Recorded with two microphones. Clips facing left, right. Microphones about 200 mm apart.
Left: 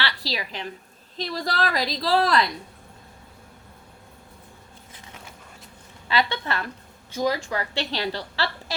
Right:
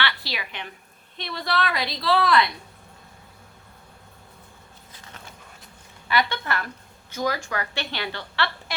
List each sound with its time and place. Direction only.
0.3 s a woman's voice: 35° left (ahead or behind)
6.1 s a woman's voice: 25° left (ahead or behind)